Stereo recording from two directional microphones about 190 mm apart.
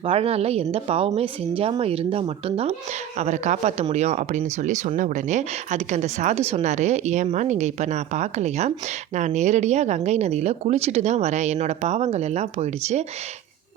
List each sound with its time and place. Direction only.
0.0 s speech: 30° right (ahead or behind)